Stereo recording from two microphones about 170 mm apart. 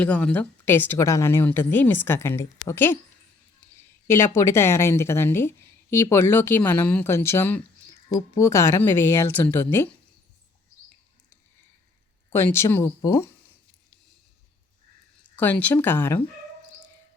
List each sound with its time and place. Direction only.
0.0 s speech: 5° left (ahead or behind)
4.0 s speech: 15° left (ahead or behind)
12.3 s speech: 15° left (ahead or behind)
15.4 s speech: 10° left (ahead or behind)